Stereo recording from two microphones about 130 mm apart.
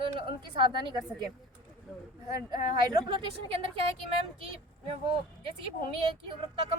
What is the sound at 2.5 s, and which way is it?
Speech, 35° right (ahead or behind).